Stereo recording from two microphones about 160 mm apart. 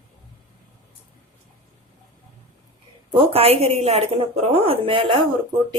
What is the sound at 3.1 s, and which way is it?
A woman's voice, 35° right (ahead or behind).